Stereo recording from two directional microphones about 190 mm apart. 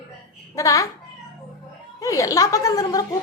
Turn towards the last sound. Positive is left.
turn(degrees=20)  # may be behind; listen again after turning